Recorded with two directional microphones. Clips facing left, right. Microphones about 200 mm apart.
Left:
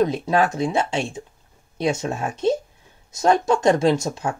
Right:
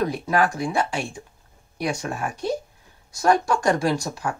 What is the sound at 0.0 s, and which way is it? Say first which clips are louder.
Speech: left 3 dB; 25° left (ahead or behind).